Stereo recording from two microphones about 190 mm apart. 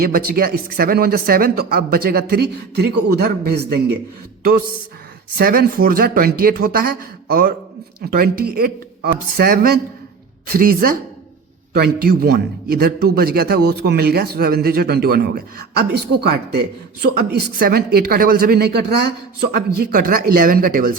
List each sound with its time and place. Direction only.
0.0 s speech: 55° right (ahead or behind)
5.4 s a man's voice: 50° right (ahead or behind)